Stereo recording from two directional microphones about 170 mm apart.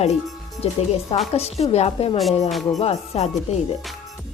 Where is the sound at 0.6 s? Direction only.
35° left (ahead or behind).